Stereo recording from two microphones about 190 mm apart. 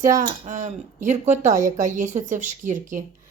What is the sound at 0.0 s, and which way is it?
A woman's voice, 45° right (ahead or behind).